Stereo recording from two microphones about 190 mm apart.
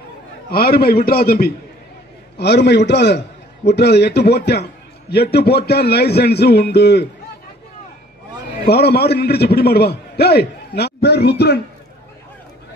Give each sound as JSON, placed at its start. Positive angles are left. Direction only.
{"t": 0.5, "sound": "a man's voice", "side_deg": 50}
{"t": 8.6, "sound": "a man's voice", "side_deg": 55}